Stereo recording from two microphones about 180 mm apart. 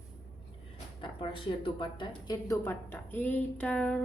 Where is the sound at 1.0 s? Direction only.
30° left (ahead or behind); by 4.0 s 5° left (ahead or behind).